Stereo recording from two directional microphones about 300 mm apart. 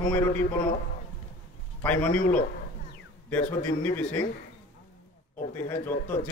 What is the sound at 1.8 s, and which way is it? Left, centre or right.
Speech, centre.